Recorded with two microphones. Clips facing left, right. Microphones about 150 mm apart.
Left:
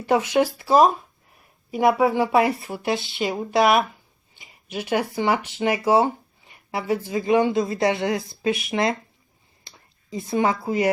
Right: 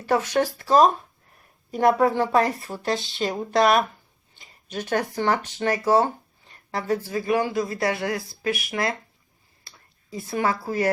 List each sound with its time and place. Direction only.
0.0 s speech: 15° left (ahead or behind)